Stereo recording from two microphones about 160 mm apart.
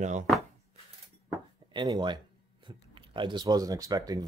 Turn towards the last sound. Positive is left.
turn(degrees=-25)  # may be behind; listen again after turning